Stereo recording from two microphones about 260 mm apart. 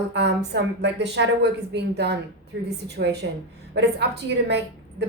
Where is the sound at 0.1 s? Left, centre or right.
Right.